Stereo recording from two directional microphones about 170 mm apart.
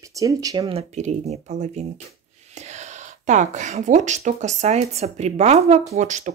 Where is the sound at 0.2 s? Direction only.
20° right (ahead or behind); by 1.7 s 40° right (ahead or behind).